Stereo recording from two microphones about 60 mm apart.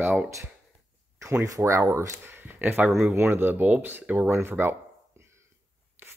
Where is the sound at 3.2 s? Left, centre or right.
Right.